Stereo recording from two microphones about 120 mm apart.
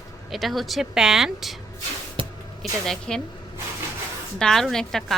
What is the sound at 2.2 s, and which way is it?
Music, 45° right (ahead or behind).